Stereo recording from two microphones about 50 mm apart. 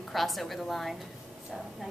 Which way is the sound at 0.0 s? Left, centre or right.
Centre.